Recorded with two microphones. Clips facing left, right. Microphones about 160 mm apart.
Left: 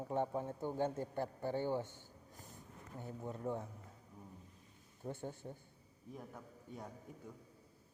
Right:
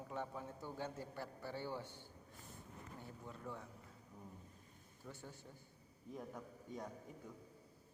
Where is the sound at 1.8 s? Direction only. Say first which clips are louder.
Left 7 dB; 45° left (ahead or behind).